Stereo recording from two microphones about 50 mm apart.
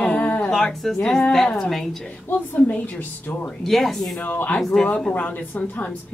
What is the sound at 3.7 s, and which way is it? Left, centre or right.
Speech, centre.